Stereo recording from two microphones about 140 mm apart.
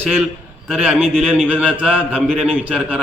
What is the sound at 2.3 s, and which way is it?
Speech, 5° left (ahead or behind).